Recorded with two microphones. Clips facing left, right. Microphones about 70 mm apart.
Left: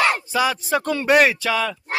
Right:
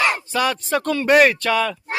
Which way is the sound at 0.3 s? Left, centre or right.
Centre.